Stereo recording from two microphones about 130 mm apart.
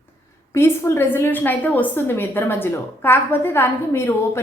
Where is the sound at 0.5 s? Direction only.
20° left (ahead or behind).